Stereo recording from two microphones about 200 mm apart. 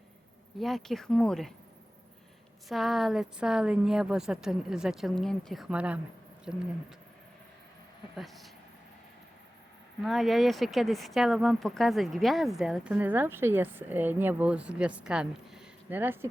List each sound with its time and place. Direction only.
0.6 s speech: centre (ahead or behind)
2.6 s speech: centre (ahead or behind)
8.1 s speech: centre (ahead or behind)
10.0 s speech: centre (ahead or behind)